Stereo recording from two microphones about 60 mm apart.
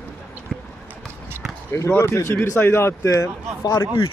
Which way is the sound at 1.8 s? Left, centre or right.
Left.